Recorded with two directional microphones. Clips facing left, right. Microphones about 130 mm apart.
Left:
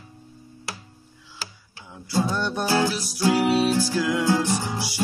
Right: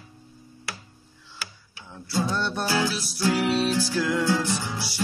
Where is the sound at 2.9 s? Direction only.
10° left (ahead or behind).